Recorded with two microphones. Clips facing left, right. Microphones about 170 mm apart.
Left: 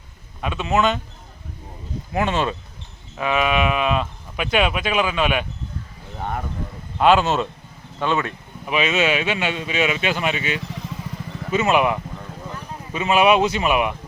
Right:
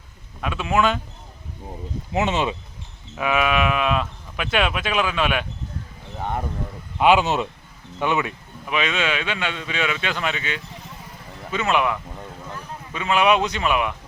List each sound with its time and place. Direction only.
0.4 s speech: 5° right (ahead or behind)
2.1 s speech: 20° right (ahead or behind)
3.2 s speech: 5° right (ahead or behind)
7.0 s speech: 10° right (ahead or behind)
8.7 s speech: 5° left (ahead or behind)
13.2 s speech: 5° left (ahead or behind)
13.6 s speech: 15° left (ahead or behind)